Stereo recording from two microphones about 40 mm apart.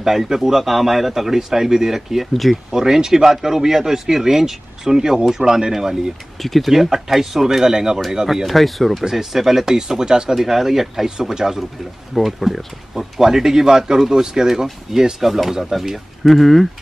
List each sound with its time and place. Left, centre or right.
0.0 s speech: centre
2.3 s speech: centre
2.7 s speech: centre
6.4 s speech: centre
9.0 s speech: centre
10.3 s speech: centre
11.1 s speech: centre
12.1 s speech: centre